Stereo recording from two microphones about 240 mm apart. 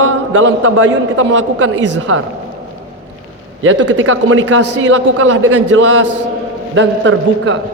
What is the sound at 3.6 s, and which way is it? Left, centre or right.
A man's voice, right.